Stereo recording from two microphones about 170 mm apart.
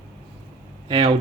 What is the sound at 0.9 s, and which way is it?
Speech, 25° right (ahead or behind).